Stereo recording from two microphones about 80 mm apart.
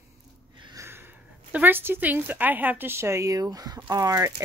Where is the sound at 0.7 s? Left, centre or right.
Right.